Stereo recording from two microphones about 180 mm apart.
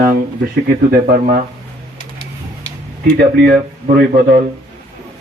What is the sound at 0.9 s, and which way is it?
Speech, 55° right (ahead or behind).